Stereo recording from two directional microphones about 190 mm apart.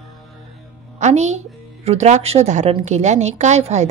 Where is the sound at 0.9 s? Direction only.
35° right (ahead or behind).